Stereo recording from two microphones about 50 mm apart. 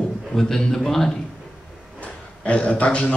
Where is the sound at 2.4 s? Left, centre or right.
Left.